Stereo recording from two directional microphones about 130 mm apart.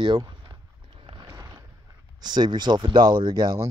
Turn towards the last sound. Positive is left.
turn(degrees=-30)  # may be behind; listen again after turning